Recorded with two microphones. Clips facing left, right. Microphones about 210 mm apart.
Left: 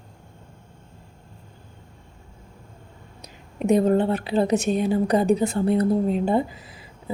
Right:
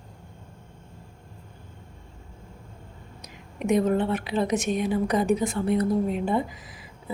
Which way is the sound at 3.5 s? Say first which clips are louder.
Left 4 dB; 35° left (ahead or behind).